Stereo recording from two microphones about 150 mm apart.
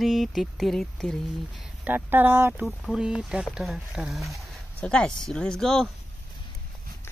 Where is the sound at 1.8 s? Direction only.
10° right (ahead or behind).